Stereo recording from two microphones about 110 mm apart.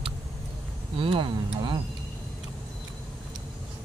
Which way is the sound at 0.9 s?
50° right (ahead or behind).